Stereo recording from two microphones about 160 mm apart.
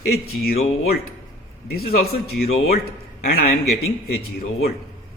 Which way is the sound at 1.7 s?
75° left (ahead or behind).